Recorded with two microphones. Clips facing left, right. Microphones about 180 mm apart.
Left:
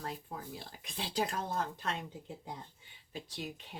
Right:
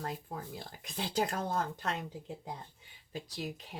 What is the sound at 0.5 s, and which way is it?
Speech, 45° right (ahead or behind).